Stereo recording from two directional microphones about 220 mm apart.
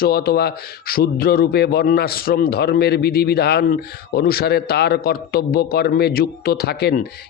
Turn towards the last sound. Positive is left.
turn(degrees=45)  # may be behind; listen again after turning